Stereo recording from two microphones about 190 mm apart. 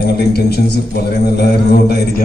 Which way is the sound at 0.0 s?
55° left (ahead or behind).